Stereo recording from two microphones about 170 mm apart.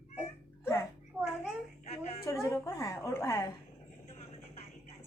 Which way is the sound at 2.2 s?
20° left (ahead or behind).